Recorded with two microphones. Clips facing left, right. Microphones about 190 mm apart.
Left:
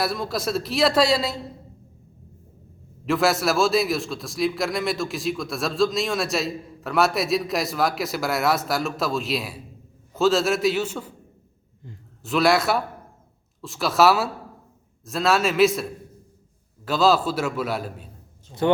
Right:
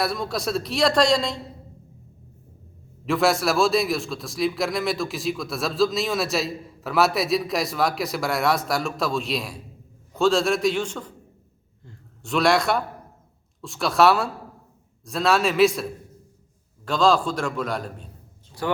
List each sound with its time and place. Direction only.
0.0 s a man's voice: centre (ahead or behind)
3.1 s a man's voice: centre (ahead or behind)
12.2 s a man's voice: centre (ahead or behind)
18.6 s speech: 25° left (ahead or behind)